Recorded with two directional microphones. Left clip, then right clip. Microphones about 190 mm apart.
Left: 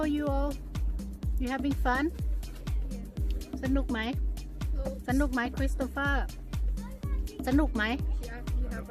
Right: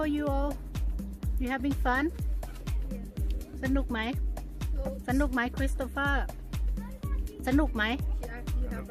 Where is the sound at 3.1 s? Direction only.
Centre (ahead or behind).